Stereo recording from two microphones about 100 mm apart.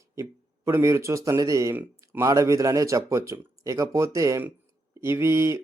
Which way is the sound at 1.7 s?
20° right (ahead or behind).